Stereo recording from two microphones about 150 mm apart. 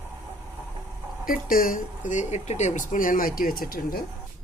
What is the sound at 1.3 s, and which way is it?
Speech, 70° left (ahead or behind).